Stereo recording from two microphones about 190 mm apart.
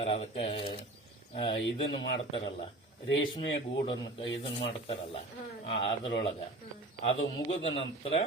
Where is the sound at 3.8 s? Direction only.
25° left (ahead or behind).